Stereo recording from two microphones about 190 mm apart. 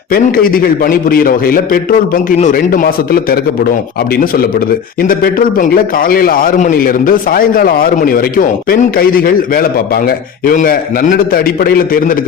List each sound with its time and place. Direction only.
0.1 s a man's voice: 50° left (ahead or behind)